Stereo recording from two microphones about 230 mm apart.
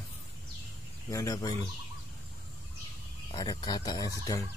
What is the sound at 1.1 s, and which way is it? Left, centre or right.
Speech, centre.